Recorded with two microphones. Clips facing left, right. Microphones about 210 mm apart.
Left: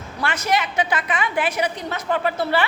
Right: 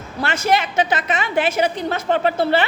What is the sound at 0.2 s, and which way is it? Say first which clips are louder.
A woman's voice: right 3 dB; 25° right (ahead or behind).